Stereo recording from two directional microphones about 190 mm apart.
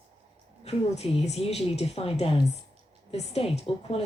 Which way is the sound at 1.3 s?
35° left (ahead or behind).